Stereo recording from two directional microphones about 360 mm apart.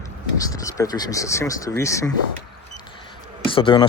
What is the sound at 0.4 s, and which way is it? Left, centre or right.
Speech, centre.